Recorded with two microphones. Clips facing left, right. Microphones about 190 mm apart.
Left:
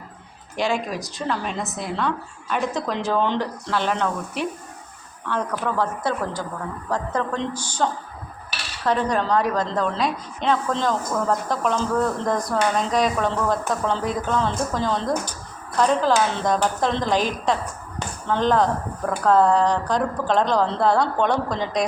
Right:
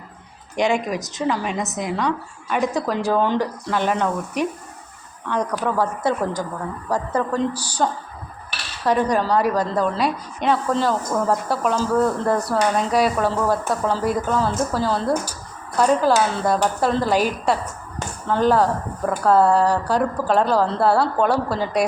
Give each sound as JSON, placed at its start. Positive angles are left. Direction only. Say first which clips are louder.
{"t": 0.5, "sound": "a woman's voice", "louder": "right 4 dB", "side_deg": -20}
{"t": 7.5, "sound": "a woman's voice", "louder": "even", "side_deg": -35}
{"t": 8.8, "sound": "a woman's voice", "louder": "right 3 dB", "side_deg": -10}